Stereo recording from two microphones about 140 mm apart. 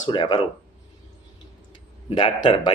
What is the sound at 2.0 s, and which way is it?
Speech, 35° left (ahead or behind).